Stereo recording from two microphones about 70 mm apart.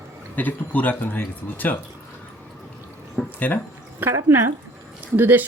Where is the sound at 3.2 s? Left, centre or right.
Centre.